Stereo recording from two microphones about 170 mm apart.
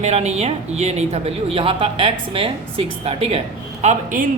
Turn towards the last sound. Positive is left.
turn(degrees=-45)  # may be behind; listen again after turning